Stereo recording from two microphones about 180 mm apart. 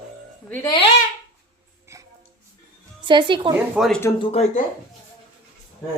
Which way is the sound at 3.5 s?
5° right (ahead or behind).